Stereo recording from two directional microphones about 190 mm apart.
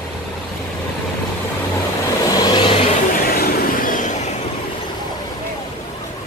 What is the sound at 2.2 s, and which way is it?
Vehicle, 20° left (ahead or behind).